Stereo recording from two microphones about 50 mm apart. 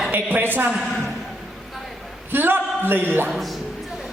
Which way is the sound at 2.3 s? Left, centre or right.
Right.